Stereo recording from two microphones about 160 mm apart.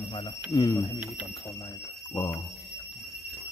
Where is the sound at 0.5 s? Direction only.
20° left (ahead or behind).